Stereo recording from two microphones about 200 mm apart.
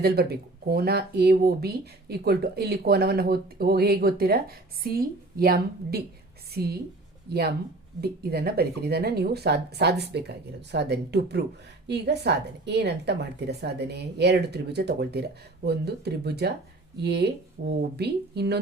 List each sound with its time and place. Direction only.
0.0 s a woman's voice: 50° right (ahead or behind)